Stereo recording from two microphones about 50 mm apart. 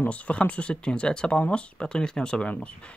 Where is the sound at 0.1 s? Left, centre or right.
Left.